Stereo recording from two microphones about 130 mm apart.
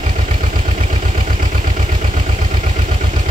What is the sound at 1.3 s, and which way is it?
Vehicle, 85° right.